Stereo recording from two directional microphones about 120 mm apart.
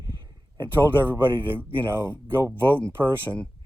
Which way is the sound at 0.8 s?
15° right (ahead or behind).